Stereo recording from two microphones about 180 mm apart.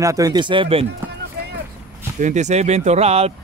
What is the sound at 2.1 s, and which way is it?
Speech, 40° right (ahead or behind).